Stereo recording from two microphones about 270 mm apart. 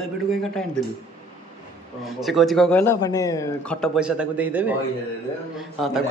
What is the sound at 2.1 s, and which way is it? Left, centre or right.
Speech, centre.